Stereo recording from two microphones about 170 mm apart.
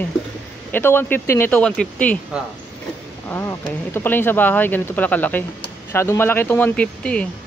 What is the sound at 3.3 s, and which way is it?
Speech, 15° left (ahead or behind).